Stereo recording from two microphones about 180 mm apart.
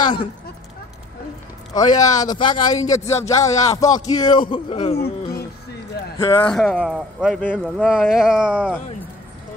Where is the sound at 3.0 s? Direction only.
35° left (ahead or behind).